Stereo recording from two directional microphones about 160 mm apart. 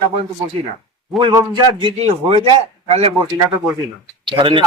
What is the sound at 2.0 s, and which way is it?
Speech, 40° right (ahead or behind).